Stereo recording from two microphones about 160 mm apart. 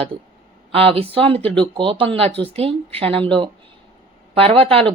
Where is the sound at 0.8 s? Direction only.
35° right (ahead or behind).